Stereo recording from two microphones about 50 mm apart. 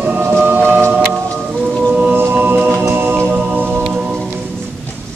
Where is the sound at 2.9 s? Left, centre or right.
Right.